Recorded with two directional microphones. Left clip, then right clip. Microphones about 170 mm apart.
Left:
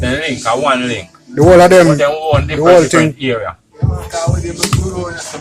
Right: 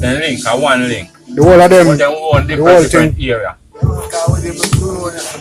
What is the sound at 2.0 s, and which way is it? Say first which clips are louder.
Speech: right 1 dB; 20° left (ahead or behind).